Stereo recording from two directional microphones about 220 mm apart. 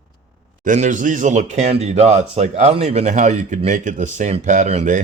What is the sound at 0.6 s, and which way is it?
Speech, 35° right (ahead or behind).